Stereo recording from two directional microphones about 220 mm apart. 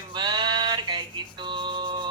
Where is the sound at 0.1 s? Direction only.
20° right (ahead or behind).